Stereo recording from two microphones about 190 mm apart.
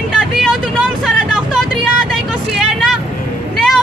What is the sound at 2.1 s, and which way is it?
Vehicle, centre (ahead or behind).